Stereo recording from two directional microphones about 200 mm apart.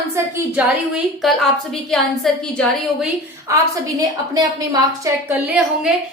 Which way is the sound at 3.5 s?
15° right (ahead or behind).